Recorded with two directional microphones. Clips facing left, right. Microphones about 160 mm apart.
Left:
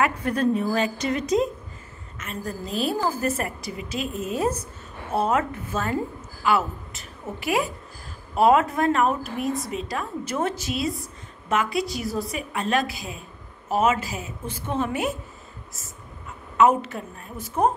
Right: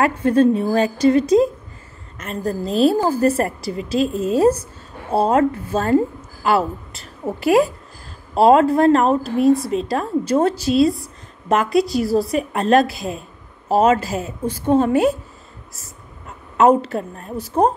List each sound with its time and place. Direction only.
0.0 s a woman's voice: 30° right (ahead or behind)
16.5 s a woman's voice: 35° right (ahead or behind)